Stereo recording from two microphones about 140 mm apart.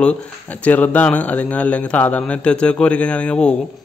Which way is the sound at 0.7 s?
10° left (ahead or behind).